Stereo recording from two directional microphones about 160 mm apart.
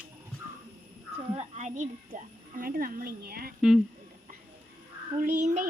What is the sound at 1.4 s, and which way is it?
A woman's voice, 45° right (ahead or behind).